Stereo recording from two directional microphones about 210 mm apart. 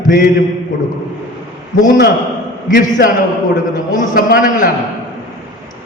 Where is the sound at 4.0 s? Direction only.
40° left (ahead or behind).